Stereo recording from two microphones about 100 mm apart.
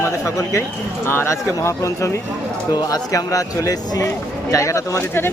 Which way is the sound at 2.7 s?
40° left (ahead or behind).